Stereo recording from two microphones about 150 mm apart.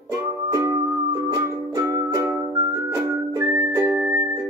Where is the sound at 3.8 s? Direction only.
10° right (ahead or behind).